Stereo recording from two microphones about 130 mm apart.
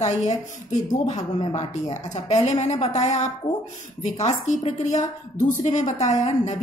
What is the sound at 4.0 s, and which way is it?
A woman's voice, 60° left (ahead or behind).